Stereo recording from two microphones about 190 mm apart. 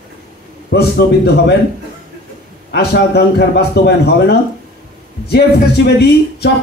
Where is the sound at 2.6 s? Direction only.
60° left (ahead or behind).